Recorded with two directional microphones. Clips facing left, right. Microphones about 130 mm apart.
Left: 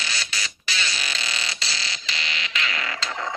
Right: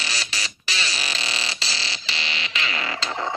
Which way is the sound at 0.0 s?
35° right (ahead or behind).